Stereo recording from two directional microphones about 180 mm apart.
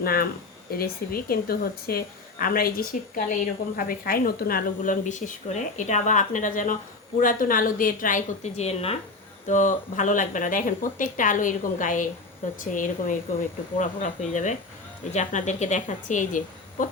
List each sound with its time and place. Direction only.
0.0 s speech: 55° left (ahead or behind); by 9.0 s 35° left (ahead or behind)
9.5 s speech: 45° left (ahead or behind)